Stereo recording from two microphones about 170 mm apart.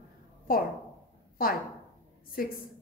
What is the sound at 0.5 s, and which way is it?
Speech, 55° left (ahead or behind).